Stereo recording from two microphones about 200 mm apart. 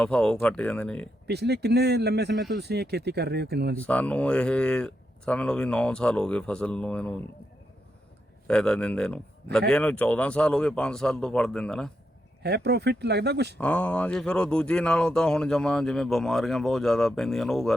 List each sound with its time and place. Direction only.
0.0 s speech: 5° left (ahead or behind)
1.3 s speech: 55° right (ahead or behind)
3.8 s speech: 5° left (ahead or behind)
8.4 s speech: 5° left (ahead or behind)
12.4 s speech: 55° right (ahead or behind)
13.6 s speech: 5° left (ahead or behind)